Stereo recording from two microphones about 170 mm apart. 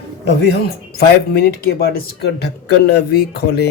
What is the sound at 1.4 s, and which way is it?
Speech, 65° left (ahead or behind).